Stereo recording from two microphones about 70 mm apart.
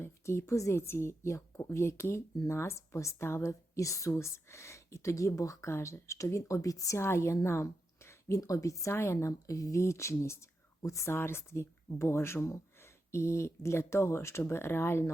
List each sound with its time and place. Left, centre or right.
0.0 s a woman's voice: left
4.1 s speech: left
9.5 s speech: left